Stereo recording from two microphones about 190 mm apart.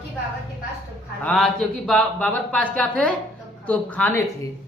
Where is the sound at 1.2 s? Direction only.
Centre (ahead or behind).